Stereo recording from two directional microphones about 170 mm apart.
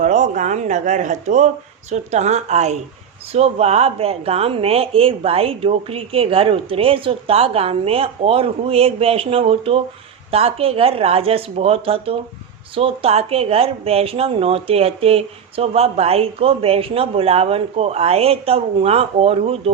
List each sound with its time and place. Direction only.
0.0 s speech: 45° right (ahead or behind)